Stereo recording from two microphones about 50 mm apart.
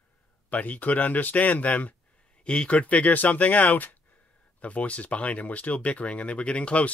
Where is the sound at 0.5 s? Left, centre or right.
Left.